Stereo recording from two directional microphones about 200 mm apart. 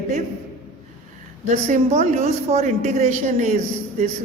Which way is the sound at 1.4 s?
35° right (ahead or behind).